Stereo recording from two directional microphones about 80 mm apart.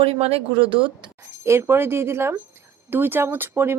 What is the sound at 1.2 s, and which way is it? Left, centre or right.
Speech, right.